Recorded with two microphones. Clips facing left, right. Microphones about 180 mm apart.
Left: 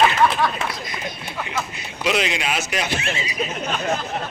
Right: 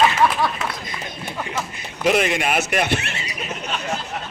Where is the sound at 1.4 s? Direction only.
50° right (ahead or behind).